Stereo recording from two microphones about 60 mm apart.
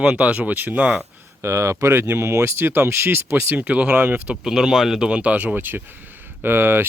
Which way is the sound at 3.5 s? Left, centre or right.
Right.